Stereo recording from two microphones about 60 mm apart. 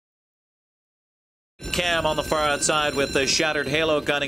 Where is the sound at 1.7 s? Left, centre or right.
Centre.